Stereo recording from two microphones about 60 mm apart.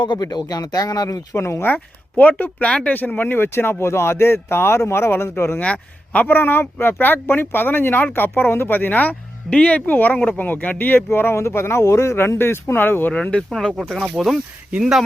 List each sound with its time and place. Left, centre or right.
0.2 s speech: left
1.4 s speech: left
1.7 s speech: left
5.5 s speech: left
13.1 s speech: centre
13.5 s speech: centre